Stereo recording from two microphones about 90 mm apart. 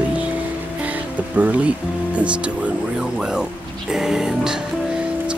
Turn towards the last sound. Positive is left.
turn(degrees=-5)  # may be behind; listen again after turning